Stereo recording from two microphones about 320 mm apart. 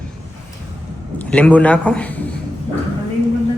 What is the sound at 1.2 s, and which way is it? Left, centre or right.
Speech, centre.